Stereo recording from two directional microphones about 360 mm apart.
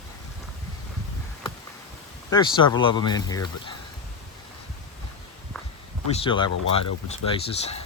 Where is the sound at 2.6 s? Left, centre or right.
Centre.